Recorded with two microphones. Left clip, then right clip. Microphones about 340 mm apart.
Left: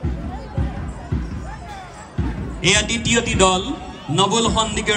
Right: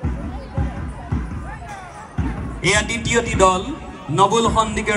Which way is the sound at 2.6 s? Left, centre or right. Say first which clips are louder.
Left 1 dB; centre.